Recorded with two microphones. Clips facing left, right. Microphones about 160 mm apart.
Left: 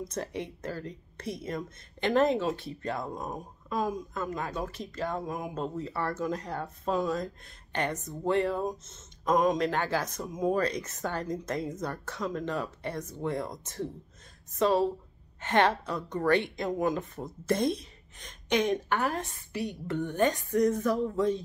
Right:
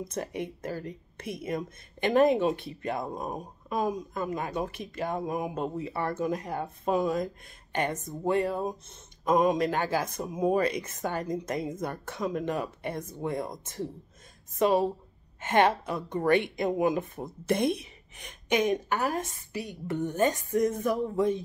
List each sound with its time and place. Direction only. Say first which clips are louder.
0.2 s speech: right 2 dB; 15° right (ahead or behind)
0.8 s speech: even; 55° right (ahead or behind)
1.4 s speech: right 3 dB; 10° right (ahead or behind)
8.4 s speech: even; 5° right (ahead or behind)
14.6 s speech: right 1 dB; 15° right (ahead or behind)
18.6 s speech: even; 10° right (ahead or behind)
20.9 s speech: right 1 dB; 15° right (ahead or behind)